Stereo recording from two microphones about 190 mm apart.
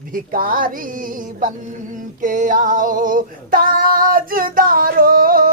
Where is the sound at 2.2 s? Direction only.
45° right (ahead or behind).